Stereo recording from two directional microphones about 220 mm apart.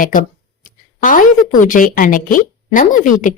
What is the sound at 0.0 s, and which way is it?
A woman's voice, 40° left (ahead or behind).